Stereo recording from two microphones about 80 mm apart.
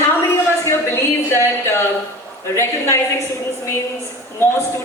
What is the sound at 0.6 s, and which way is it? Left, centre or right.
A woman's voice, left.